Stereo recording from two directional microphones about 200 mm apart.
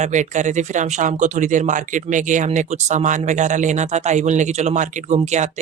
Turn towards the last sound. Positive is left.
turn(degrees=-35)  # may be behind; listen again after turning